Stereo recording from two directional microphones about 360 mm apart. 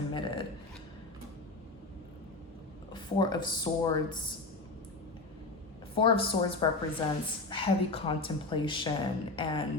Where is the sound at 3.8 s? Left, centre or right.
Centre.